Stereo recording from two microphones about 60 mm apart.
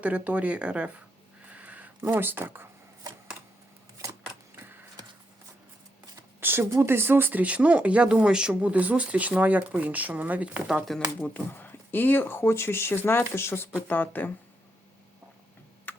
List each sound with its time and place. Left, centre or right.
0.0 s speech: right
1.5 s a sound: right
6.4 s a sound: right
6.7 s speech: right
7.4 s speech: right
10.9 s speech: centre
11.3 s speech: left
13.8 s speech: left
15.9 s computer keyboard: left